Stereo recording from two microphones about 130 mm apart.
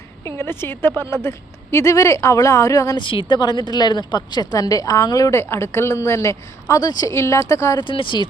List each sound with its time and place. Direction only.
0.3 s speech: 20° left (ahead or behind)
7.9 s speech: 40° left (ahead or behind)